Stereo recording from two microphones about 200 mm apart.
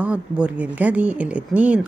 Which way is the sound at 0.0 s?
5° right (ahead or behind).